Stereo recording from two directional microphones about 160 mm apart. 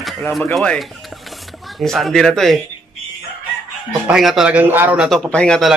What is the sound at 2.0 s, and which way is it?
Speech, centre (ahead or behind).